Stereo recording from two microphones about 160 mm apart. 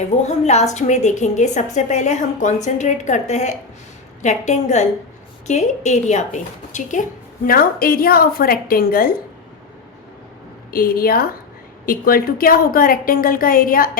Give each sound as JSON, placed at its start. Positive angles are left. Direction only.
{"t": 0.3, "sound": "a woman's voice", "side_deg": 45}
{"t": 7.4, "sound": "a woman's voice", "side_deg": 65}
{"t": 10.7, "sound": "a woman's voice", "side_deg": 65}